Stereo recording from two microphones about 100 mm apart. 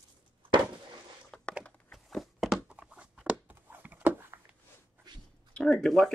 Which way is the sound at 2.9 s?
10° right (ahead or behind).